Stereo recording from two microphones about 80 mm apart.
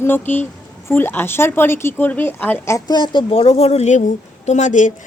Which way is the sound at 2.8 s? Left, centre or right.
Left.